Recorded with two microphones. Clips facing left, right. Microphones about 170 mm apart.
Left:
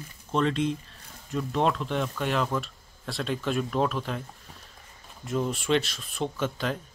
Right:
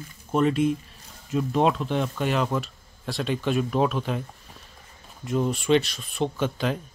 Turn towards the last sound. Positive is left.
turn(degrees=0)  # may be behind; listen again after turning